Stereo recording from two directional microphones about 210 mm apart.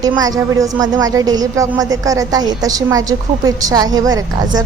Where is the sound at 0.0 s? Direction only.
15° right (ahead or behind).